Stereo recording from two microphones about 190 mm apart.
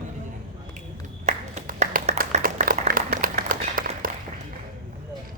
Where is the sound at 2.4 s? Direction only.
45° right (ahead or behind).